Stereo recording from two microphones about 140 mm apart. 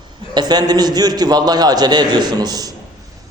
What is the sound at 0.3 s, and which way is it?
A man's voice, 30° right (ahead or behind).